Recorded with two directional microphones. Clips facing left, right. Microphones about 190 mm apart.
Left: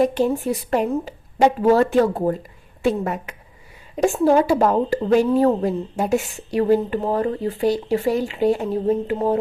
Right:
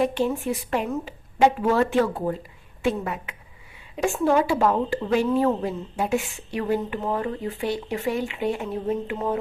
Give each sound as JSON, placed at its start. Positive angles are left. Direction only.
{"t": 0.0, "sound": "a woman's voice", "side_deg": 40}